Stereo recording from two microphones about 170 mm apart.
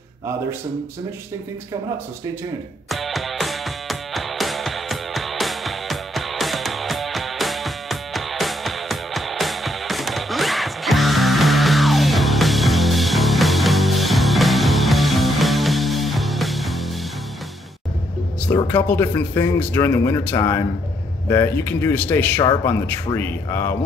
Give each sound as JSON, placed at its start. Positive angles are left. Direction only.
{"t": 2.9, "sound": "music", "side_deg": 0}
{"t": 18.5, "sound": "speech", "side_deg": 15}
{"t": 22.4, "sound": "speech", "side_deg": 25}